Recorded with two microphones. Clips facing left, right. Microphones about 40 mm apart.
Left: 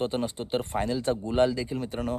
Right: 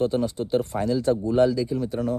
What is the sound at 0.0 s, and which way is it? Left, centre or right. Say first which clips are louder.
Speech: right 5 dB; left.